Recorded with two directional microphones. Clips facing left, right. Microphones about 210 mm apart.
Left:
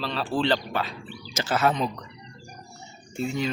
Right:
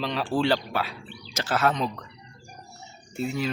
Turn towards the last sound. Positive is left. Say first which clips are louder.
# left 1 dB
turn(degrees=-5)  # may be behind; listen again after turning